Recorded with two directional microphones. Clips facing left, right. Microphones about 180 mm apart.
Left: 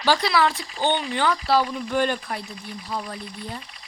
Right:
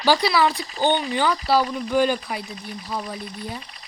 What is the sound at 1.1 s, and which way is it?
Speech, centre (ahead or behind).